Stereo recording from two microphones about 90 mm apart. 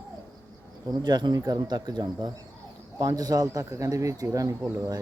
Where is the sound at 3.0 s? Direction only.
40° right (ahead or behind).